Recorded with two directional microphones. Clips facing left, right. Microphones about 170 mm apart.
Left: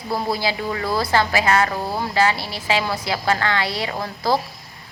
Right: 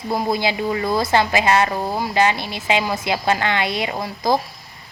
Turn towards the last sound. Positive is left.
turn(degrees=-15)  # may be behind; listen again after turning